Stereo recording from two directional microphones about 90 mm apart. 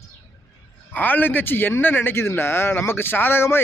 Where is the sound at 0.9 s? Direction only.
20° left (ahead or behind).